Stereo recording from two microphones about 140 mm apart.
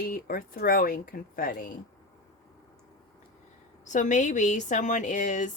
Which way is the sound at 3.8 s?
60° left (ahead or behind).